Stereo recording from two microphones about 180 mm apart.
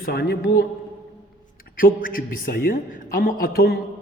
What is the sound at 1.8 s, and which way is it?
A man's voice, 50° left (ahead or behind).